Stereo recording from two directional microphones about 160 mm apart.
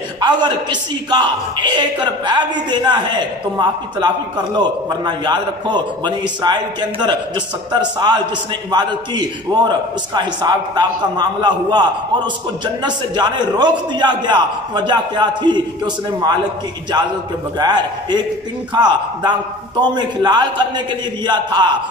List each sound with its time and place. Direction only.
0.2 s a man's voice: 30° right (ahead or behind)
17.6 s a man's voice: 25° right (ahead or behind)